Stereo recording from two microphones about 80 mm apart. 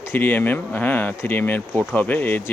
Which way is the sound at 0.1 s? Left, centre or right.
Left.